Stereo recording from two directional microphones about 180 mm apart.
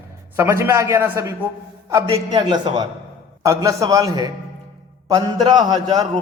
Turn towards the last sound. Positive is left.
turn(degrees=-25)  # may be behind; listen again after turning